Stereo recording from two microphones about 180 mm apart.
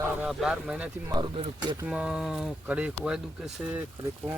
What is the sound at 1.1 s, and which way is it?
Speech, 25° right (ahead or behind).